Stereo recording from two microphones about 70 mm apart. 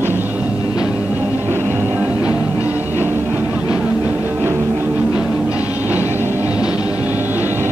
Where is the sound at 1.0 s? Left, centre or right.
Right.